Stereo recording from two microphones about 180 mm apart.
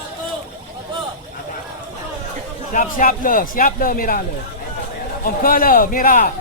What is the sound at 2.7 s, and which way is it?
A man's voice, 50° left (ahead or behind).